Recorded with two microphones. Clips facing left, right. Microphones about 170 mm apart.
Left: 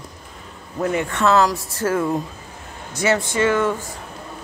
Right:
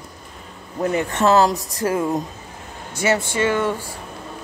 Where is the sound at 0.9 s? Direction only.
35° right (ahead or behind).